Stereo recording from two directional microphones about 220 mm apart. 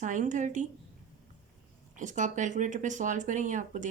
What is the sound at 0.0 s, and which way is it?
Speech, 35° right (ahead or behind).